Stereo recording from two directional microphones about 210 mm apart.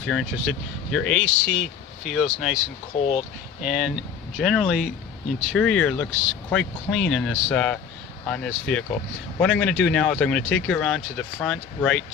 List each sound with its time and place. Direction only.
0.1 s speech: centre (ahead or behind)
3.0 s speech: 30° left (ahead or behind)
3.6 s speech: centre (ahead or behind)